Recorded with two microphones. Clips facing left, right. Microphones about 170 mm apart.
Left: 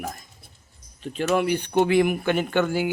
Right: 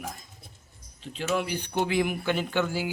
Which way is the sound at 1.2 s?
60° left (ahead or behind).